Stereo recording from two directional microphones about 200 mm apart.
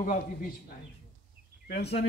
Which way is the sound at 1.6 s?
55° left (ahead or behind).